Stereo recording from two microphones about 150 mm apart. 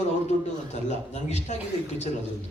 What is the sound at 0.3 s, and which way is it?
A man's voice, 50° left (ahead or behind).